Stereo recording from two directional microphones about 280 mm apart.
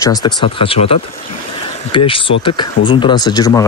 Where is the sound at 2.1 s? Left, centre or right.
Centre.